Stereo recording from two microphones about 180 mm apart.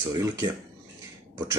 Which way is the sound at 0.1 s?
20° right (ahead or behind).